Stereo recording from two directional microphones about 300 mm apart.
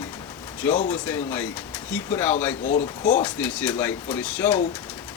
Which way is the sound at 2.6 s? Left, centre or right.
Left.